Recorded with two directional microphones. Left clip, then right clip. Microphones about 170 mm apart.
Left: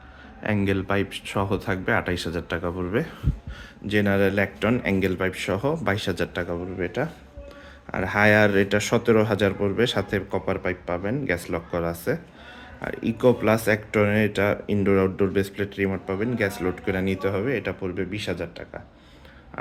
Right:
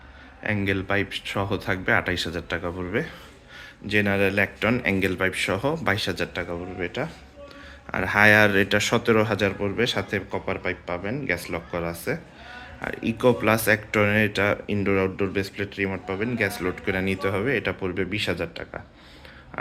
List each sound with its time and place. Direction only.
0.4 s speech: 30° left (ahead or behind)
7.9 s speech: 20° left (ahead or behind)
12.8 s speech: 20° left (ahead or behind); by 18.8 s 10° right (ahead or behind)